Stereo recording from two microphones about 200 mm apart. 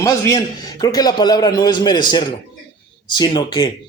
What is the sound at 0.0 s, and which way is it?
Speech, 15° left (ahead or behind).